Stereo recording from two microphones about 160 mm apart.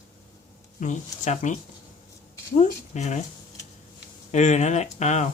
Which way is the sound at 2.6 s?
45° left (ahead or behind).